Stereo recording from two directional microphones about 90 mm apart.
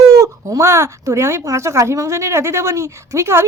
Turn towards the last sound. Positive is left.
turn(degrees=-30)  # may be behind; listen again after turning